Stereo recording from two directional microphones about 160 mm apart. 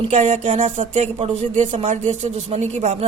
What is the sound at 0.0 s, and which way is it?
A man's voice, 45° right (ahead or behind).